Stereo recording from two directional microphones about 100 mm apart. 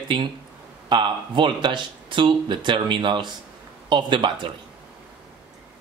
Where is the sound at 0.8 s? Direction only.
50° right (ahead or behind).